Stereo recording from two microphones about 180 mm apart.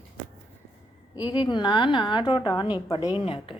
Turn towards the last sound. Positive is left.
turn(degrees=30)  # may be behind; listen again after turning